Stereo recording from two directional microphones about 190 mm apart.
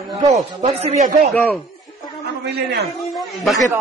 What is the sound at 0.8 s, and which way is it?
Speech, 35° right (ahead or behind).